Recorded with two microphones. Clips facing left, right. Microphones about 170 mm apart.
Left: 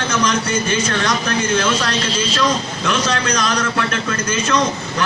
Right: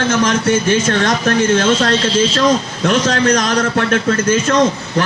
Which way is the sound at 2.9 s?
50° right (ahead or behind).